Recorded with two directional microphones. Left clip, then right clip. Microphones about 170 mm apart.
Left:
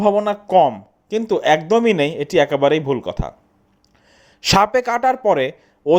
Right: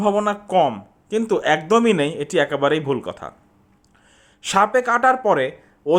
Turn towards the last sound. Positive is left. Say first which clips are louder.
# left 4 dB
turn(degrees=25)  # may be behind; listen again after turning